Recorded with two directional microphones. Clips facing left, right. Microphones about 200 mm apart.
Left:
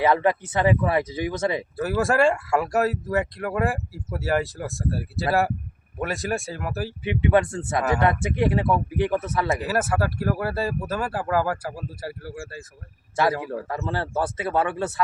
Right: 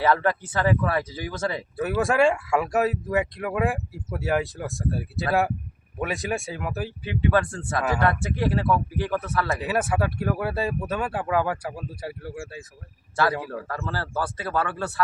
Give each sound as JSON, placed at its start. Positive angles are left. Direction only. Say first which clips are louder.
{"t": 0.0, "sound": "speech", "louder": "left 2 dB", "side_deg": 20}
{"t": 1.7, "sound": "speech", "louder": "right 1 dB", "side_deg": 0}
{"t": 7.0, "sound": "speech", "louder": "left 3 dB", "side_deg": 20}
{"t": 9.6, "sound": "speech", "louder": "left 1 dB", "side_deg": 0}
{"t": 13.4, "sound": "speech", "louder": "left 3 dB", "side_deg": 20}